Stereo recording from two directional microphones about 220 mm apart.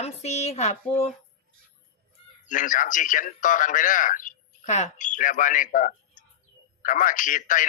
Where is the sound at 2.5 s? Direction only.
35° left (ahead or behind).